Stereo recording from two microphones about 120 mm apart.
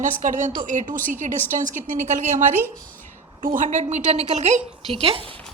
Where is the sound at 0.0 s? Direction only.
90° right.